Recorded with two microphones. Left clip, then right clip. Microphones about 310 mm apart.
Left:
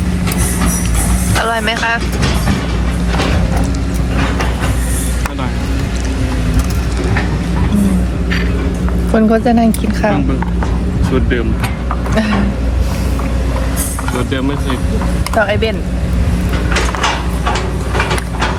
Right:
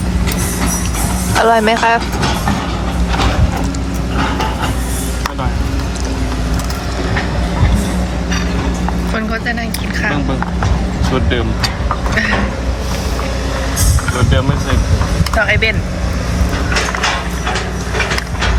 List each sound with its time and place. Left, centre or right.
1.4 s speech: centre
9.1 s speech: centre
15.4 s speech: centre